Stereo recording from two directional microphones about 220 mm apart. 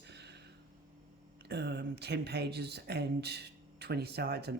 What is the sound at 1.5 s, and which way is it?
Speech, 50° right (ahead or behind).